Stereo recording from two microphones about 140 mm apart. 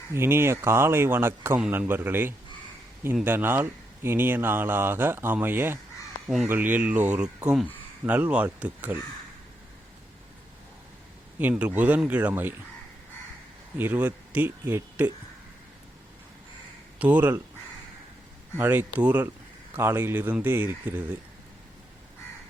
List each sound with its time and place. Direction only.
0.1 s speech: 15° right (ahead or behind)
11.3 s speech: 10° right (ahead or behind)
13.7 s speech: 15° right (ahead or behind)
17.0 s speech: 10° right (ahead or behind)
18.5 s speech: 15° right (ahead or behind)